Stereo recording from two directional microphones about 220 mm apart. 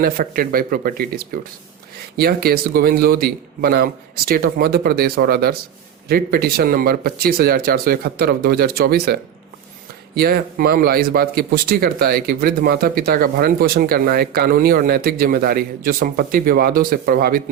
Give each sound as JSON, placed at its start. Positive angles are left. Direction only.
{"t": 0.0, "sound": "speech", "side_deg": -40}